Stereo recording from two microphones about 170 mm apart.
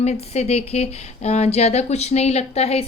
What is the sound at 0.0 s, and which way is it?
A woman's voice, 40° left (ahead or behind).